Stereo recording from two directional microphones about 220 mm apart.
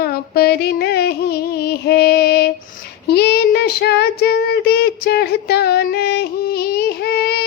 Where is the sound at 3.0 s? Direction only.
50° left (ahead or behind).